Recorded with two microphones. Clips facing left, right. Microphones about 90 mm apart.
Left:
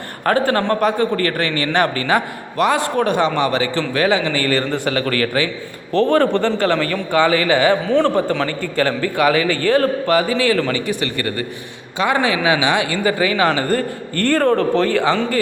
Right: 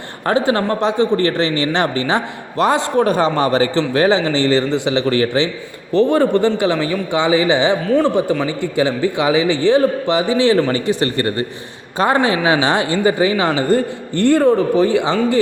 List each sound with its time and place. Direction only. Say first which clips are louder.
0.3 s a man's voice: even; 20° right (ahead or behind)